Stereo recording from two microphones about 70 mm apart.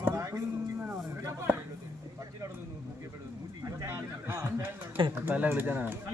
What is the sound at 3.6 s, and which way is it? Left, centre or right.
Speech, right.